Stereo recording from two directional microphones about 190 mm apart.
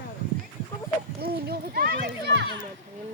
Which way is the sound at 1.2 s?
55° right (ahead or behind).